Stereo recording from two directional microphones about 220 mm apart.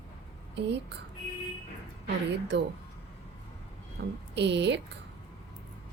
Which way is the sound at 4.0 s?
50° right (ahead or behind).